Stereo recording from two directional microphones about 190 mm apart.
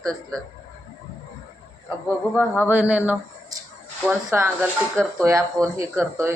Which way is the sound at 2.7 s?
10° right (ahead or behind).